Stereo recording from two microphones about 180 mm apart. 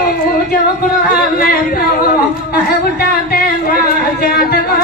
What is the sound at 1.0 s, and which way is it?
Singing, 55° left (ahead or behind).